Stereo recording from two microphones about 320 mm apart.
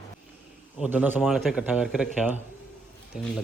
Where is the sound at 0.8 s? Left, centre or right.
Centre.